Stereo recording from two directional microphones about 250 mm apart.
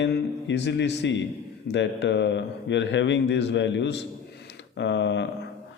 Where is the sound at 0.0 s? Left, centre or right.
Left.